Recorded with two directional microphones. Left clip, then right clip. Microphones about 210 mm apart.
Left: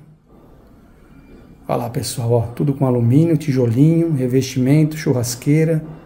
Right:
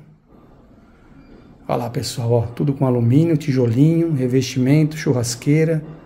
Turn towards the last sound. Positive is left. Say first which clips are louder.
# left 1 dB
turn(degrees=0)  # may be behind; listen again after turning